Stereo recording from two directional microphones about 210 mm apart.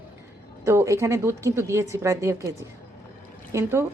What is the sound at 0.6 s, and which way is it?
A woman's voice, 15° right (ahead or behind).